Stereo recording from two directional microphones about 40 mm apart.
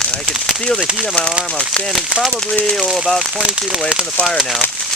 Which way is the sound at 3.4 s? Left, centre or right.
Centre.